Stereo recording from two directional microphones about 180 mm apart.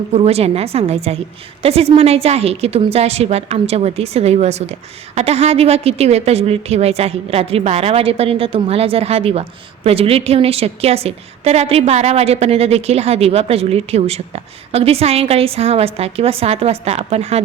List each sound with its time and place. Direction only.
0.1 s a woman's voice: 35° right (ahead or behind)